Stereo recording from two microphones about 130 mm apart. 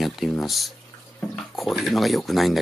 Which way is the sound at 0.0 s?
Centre (ahead or behind).